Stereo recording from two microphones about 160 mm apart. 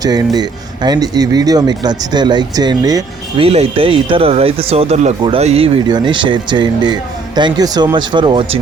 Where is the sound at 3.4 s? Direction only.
35° right (ahead or behind).